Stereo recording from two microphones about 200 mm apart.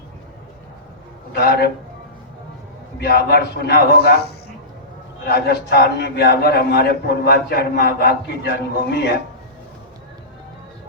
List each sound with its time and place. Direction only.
1.3 s a man's voice: 50° left (ahead or behind)
3.0 s a man's voice: 55° left (ahead or behind)
5.3 s a man's voice: 55° left (ahead or behind)